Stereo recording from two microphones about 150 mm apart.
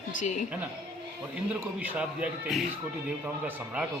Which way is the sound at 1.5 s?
10° right (ahead or behind).